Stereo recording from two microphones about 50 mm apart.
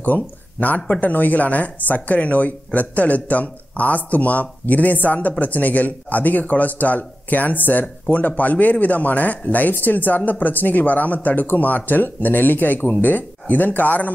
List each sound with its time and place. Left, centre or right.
0.0 s a man's voice: left